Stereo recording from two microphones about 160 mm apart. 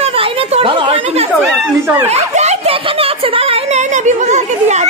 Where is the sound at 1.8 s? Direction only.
15° right (ahead or behind).